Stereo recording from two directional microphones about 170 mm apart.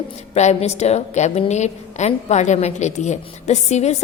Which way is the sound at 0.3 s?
40° left (ahead or behind).